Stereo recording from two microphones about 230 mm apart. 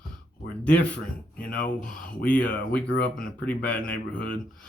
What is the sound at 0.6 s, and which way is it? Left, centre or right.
A man's voice, centre.